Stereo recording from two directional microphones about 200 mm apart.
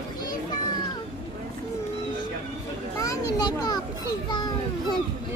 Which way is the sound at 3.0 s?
20° left (ahead or behind).